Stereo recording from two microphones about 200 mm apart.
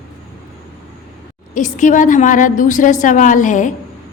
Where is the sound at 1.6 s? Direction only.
40° left (ahead or behind).